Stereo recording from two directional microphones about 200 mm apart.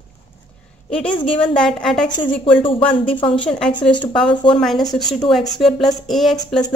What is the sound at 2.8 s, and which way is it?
Speech, 5° left (ahead or behind).